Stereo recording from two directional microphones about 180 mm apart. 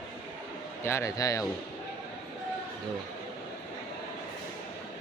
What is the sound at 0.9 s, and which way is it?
Speech, 15° left (ahead or behind).